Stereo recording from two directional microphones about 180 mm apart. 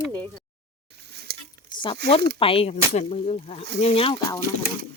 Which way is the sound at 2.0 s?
65° right (ahead or behind).